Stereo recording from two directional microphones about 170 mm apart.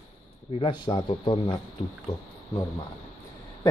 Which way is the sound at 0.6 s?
30° left (ahead or behind).